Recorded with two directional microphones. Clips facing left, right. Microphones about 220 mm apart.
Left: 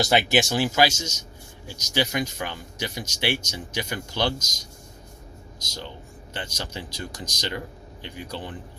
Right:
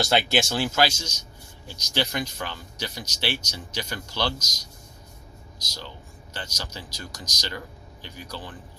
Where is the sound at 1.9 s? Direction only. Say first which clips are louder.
Left 2 dB; 15° left (ahead or behind).